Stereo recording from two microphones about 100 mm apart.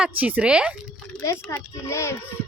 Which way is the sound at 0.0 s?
15° right (ahead or behind).